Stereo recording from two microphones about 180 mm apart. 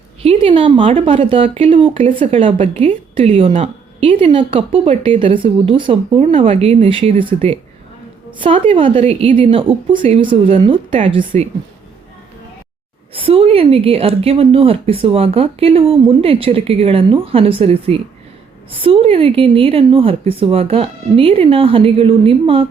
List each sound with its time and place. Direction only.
0.2 s a woman's voice: 30° right (ahead or behind)
11.2 s a woman's voice: 50° right (ahead or behind)
13.1 s speech: 30° right (ahead or behind)